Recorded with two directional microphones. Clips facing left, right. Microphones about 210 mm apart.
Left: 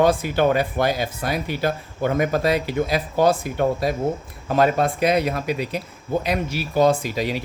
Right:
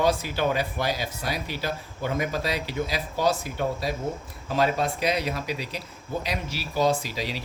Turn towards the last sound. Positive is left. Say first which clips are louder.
# left 6 dB
turn(degrees=55)  # may be behind; listen again after turning